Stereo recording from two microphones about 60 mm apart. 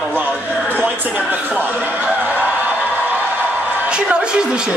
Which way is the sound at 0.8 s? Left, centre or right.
Right.